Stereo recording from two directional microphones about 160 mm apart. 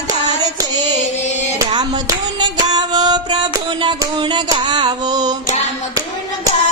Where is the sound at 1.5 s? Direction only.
25° right (ahead or behind).